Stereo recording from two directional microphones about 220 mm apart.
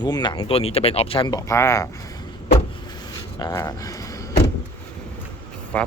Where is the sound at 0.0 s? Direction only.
20° left (ahead or behind).